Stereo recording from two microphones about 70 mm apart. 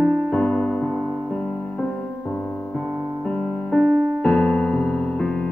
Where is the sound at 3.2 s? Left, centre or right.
Centre.